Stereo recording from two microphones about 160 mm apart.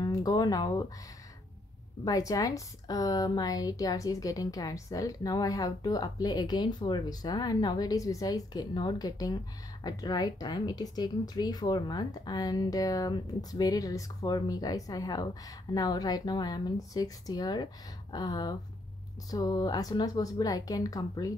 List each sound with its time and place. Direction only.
0.0 s speech: 20° left (ahead or behind)
2.0 s speech: 20° left (ahead or behind)